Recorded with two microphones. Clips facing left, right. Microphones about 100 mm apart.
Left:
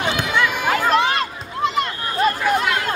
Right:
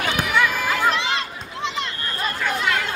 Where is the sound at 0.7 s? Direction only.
50° left (ahead or behind).